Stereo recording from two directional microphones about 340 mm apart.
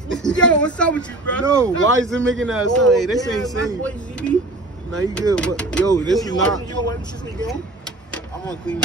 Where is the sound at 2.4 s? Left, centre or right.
Centre.